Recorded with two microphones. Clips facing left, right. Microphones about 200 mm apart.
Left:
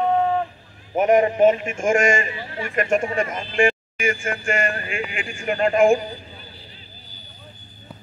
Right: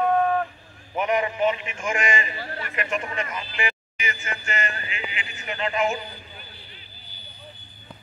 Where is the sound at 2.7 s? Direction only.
45° left (ahead or behind).